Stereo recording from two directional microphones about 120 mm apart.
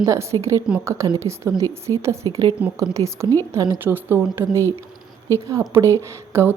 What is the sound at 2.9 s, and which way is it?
Speech, 25° right (ahead or behind).